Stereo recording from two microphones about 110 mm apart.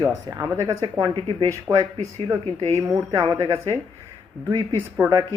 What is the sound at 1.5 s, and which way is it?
Speech, 30° right (ahead or behind).